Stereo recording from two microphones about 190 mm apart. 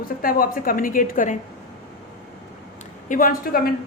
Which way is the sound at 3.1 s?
50° left (ahead or behind).